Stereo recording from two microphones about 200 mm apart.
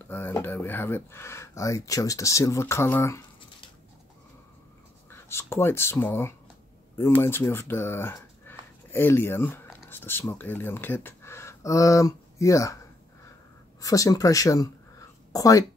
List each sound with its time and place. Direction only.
0.0 s speech: 10° left (ahead or behind)
5.1 s speech: 10° left (ahead or behind)
13.7 s speech: 15° left (ahead or behind)